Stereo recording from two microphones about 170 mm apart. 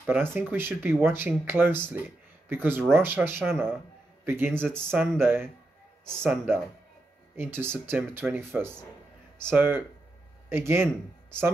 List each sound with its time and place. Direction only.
0.0 s a man's voice: 10° right (ahead or behind)